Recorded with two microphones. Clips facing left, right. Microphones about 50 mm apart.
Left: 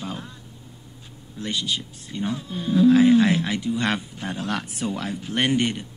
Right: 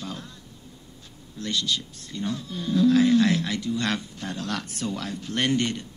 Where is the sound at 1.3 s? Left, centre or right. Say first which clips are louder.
Left 1 dB; centre.